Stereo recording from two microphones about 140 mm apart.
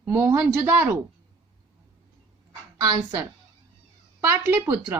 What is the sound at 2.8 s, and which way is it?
Speech, 25° right (ahead or behind).